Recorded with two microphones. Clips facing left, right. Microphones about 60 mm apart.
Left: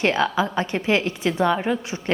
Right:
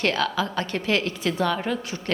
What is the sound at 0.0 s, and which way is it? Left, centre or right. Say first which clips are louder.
A woman's voice: left 3 dB; left.